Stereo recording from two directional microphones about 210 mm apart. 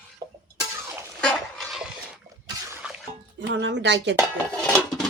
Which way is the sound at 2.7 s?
5° right (ahead or behind).